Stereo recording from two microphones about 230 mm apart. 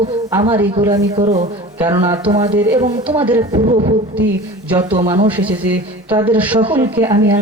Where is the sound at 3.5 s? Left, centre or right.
Right.